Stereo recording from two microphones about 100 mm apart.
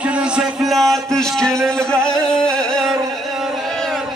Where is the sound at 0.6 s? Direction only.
Centre (ahead or behind).